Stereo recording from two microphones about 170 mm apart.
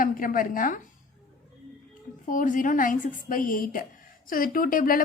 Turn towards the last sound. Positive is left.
turn(degrees=55)  # may be behind; listen again after turning